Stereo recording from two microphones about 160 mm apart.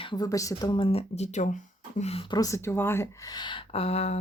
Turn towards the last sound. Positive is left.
turn(degrees=40)  # may be behind; listen again after turning